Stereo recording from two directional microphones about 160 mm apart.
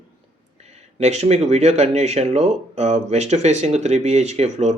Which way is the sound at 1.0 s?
45° right (ahead or behind).